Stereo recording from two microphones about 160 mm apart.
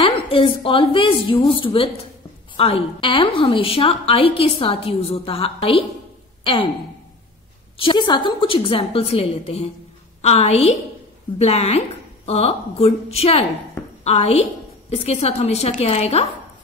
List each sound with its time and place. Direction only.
0.0 s a woman's voice: 35° left (ahead or behind)
7.7 s a woman's voice: 30° left (ahead or behind)